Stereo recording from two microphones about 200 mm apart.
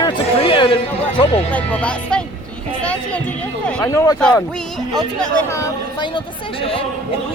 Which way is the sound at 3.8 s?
15° left (ahead or behind).